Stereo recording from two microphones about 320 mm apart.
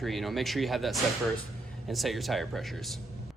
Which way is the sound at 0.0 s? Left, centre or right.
Centre.